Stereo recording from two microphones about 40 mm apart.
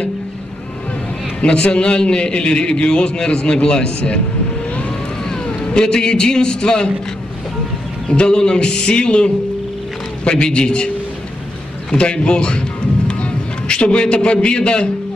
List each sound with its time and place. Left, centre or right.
1.4 s a man's voice: left
4.6 s vehicle: left
5.2 s a man's voice: centre
8.1 s a man's voice: left
11.9 s a man's voice: left